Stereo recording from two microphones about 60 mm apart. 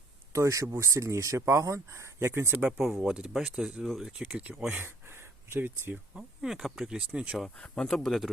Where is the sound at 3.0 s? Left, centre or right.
Centre.